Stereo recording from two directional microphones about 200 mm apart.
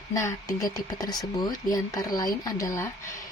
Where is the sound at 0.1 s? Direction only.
15° left (ahead or behind).